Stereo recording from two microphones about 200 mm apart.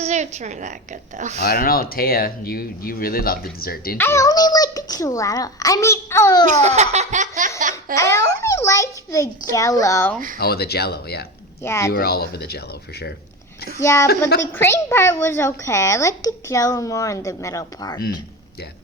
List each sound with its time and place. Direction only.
0.0 s a woman's voice: 35° right (ahead or behind)
1.5 s speech: 50° left (ahead or behind)
3.9 s a child's voice: 10° left (ahead or behind)
6.5 s laughter: 35° right (ahead or behind)
7.9 s a child's voice: 15° left (ahead or behind)
10.3 s speech: 50° left (ahead or behind)
11.6 s a child's voice: 10° left (ahead or behind)
11.9 s speech: 50° left (ahead or behind)
13.8 s a child's voice: 15° left (ahead or behind)